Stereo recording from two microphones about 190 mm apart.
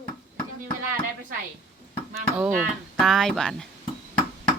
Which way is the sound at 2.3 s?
5° right (ahead or behind).